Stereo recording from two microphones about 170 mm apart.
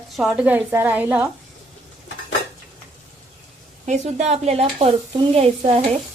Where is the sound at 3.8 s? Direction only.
45° right (ahead or behind).